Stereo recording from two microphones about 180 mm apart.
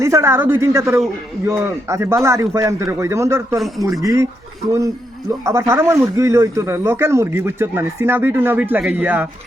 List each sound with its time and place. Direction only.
0.0 s speech: 15° right (ahead or behind)
5.4 s speech: 15° right (ahead or behind)